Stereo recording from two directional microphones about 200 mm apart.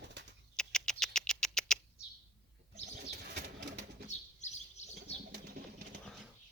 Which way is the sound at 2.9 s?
50° right (ahead or behind).